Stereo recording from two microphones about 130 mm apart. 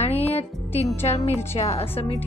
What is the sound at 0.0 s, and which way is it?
Music, 55° left (ahead or behind).